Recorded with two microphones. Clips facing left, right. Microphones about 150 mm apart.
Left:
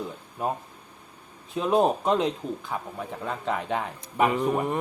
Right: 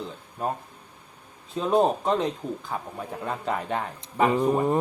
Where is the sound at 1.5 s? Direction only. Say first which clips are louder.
Even; 5° left (ahead or behind).